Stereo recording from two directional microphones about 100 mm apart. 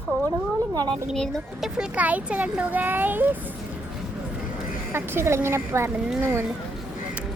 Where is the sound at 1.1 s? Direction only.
Centre (ahead or behind).